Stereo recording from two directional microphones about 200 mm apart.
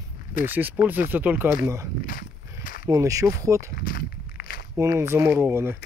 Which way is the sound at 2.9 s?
15° right (ahead or behind).